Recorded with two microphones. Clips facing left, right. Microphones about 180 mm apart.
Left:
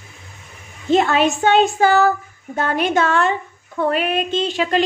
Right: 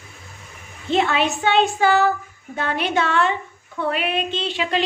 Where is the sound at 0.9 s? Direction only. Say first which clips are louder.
Left 4 dB; 45° left (ahead or behind).